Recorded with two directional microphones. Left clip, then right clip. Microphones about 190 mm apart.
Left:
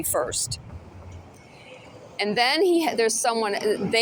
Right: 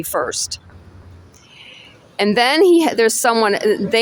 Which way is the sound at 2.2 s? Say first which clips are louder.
Right 8 dB; 65° right (ahead or behind).